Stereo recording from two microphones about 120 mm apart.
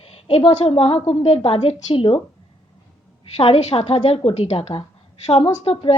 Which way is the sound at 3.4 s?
55° left (ahead or behind).